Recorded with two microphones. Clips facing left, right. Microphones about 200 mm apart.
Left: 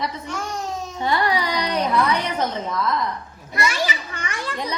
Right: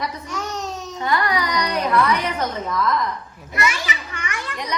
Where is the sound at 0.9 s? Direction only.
25° left (ahead or behind).